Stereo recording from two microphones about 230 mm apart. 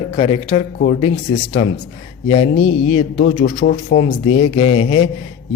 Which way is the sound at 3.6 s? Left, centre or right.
Left.